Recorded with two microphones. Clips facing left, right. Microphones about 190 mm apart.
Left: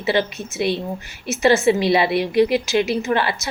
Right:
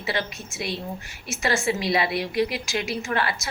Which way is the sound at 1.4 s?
25° left (ahead or behind).